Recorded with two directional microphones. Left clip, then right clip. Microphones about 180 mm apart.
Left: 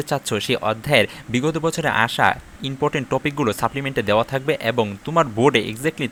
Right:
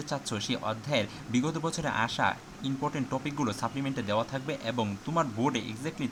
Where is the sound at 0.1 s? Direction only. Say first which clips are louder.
Left 11 dB; 30° left (ahead or behind).